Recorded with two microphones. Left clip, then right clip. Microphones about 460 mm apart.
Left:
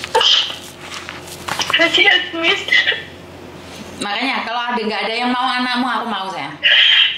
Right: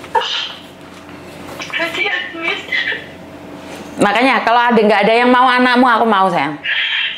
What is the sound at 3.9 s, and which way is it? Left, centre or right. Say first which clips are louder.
A man's voice: right 8 dB; right.